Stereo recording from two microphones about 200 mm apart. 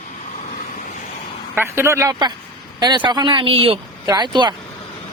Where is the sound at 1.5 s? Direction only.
10° right (ahead or behind).